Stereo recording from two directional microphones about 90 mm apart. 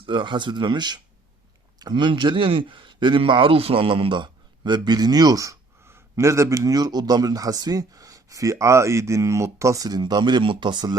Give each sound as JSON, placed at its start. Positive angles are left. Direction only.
{"t": 0.0, "sound": "speech", "side_deg": -65}
{"t": 10.0, "sound": "speech", "side_deg": -55}